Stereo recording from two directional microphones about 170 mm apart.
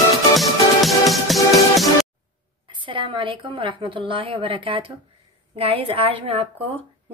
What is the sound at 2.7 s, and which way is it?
A woman's voice, 30° right (ahead or behind).